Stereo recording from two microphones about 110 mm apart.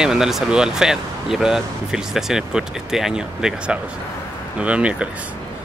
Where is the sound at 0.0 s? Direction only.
5° right (ahead or behind).